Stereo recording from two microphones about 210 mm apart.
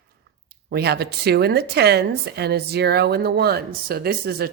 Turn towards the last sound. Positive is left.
turn(degrees=-45)  # may be behind; listen again after turning